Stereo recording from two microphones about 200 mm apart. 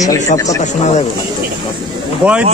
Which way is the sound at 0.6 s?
35° left (ahead or behind).